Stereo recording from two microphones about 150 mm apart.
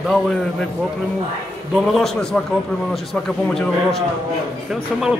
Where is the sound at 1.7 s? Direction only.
Centre (ahead or behind).